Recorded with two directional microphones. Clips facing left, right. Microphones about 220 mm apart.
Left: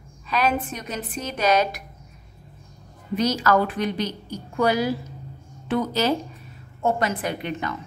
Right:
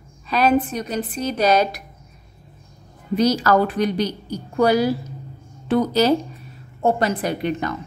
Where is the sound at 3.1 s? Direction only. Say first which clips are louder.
Right 4 dB; 35° right (ahead or behind).